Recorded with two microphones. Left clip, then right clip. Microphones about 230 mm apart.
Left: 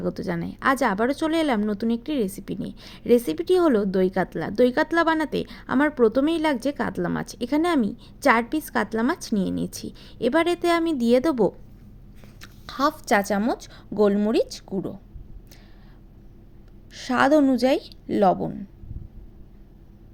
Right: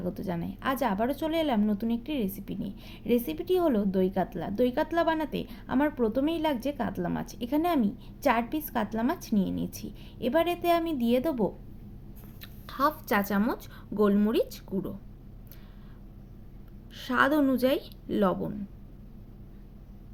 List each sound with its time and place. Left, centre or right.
0.0 s a woman's voice: left
16.9 s a woman's voice: left